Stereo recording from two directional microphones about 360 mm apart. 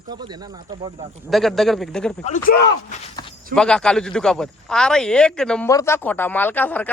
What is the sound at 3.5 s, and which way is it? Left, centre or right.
A man's voice, centre.